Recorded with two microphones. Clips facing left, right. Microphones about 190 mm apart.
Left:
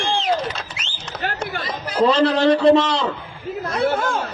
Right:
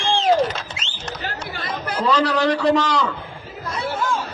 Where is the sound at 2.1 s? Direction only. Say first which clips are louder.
Left 3 dB; 30° left (ahead or behind).